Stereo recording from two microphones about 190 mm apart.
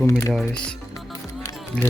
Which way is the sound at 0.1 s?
15° left (ahead or behind).